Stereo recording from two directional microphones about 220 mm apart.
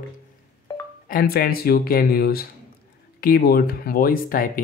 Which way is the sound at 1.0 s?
45° left (ahead or behind).